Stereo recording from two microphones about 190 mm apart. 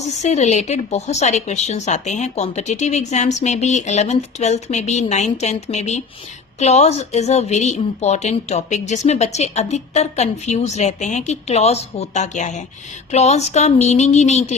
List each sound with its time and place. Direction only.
0.2 s a woman's voice: 35° left (ahead or behind)